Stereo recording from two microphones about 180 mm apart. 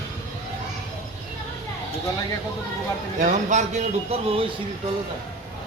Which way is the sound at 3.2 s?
40° right (ahead or behind).